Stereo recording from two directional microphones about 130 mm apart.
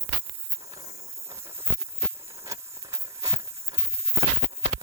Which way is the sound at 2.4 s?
25° right (ahead or behind).